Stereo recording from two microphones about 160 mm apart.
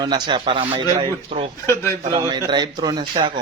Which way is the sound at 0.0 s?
30° right (ahead or behind).